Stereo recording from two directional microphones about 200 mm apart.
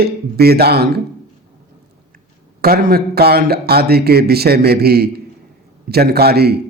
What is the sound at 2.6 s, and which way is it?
Speech, 50° right (ahead or behind).